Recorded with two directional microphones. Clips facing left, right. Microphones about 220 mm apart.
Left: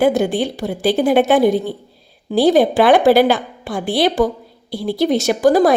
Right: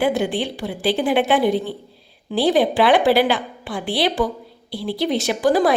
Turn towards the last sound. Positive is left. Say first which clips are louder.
# left 4 dB
turn(degrees=45)  # may be behind; listen again after turning